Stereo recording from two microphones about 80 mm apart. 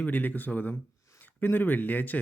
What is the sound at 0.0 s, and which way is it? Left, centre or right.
Speech, left.